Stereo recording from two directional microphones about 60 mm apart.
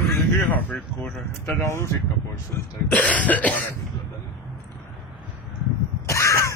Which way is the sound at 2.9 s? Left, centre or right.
Left.